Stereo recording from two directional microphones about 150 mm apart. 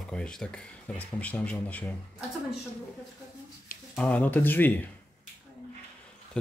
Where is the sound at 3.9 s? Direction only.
10° left (ahead or behind).